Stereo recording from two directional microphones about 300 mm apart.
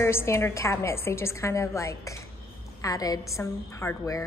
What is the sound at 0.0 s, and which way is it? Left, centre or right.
A woman's voice, centre.